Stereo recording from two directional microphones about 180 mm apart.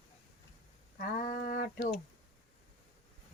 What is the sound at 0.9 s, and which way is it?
Speech, 55° left (ahead or behind).